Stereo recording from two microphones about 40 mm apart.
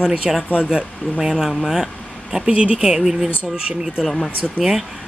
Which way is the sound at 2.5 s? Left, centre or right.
Right.